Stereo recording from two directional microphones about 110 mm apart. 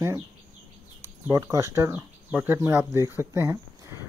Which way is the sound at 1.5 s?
25° right (ahead or behind).